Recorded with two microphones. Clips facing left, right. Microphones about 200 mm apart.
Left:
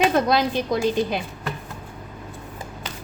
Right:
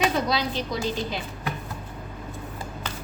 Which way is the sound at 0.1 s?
55° left (ahead or behind).